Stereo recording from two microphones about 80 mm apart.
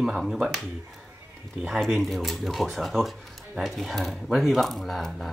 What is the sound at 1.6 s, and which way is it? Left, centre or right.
Speech, centre.